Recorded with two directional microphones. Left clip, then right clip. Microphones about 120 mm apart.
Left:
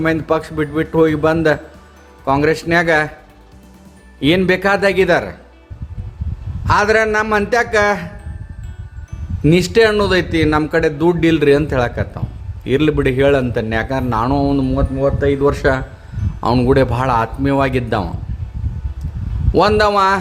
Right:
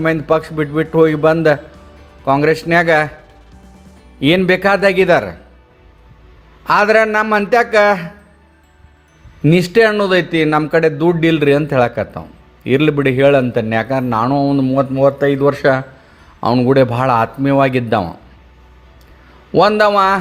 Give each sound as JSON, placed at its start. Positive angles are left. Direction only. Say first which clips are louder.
{"t": 0.0, "sound": "a man's voice", "louder": "right 2 dB", "side_deg": -15}
{"t": 4.2, "sound": "a man's voice", "louder": "right 2 dB", "side_deg": -20}
{"t": 6.7, "sound": "a man's voice", "louder": "right 2 dB", "side_deg": -20}
{"t": 9.5, "sound": "a man's voice", "louder": "right 1 dB", "side_deg": -15}
{"t": 14.3, "sound": "a man's voice", "louder": "right 2 dB", "side_deg": -5}
{"t": 14.9, "sound": "a man's voice", "louder": "right 2 dB", "side_deg": -25}
{"t": 19.5, "sound": "a man's voice", "louder": "right 2 dB", "side_deg": -10}